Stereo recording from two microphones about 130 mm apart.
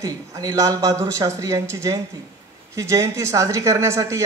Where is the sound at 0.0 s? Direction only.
30° right (ahead or behind).